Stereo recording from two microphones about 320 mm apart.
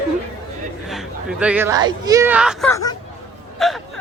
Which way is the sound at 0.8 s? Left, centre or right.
Centre.